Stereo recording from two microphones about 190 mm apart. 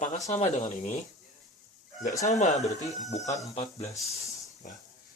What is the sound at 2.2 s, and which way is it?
Speech, 40° left (ahead or behind).